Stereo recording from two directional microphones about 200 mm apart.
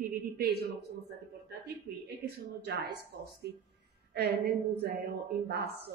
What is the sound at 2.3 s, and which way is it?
Speech, 55° right (ahead or behind).